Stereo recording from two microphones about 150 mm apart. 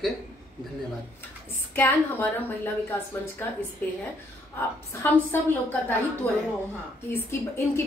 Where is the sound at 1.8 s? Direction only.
15° left (ahead or behind).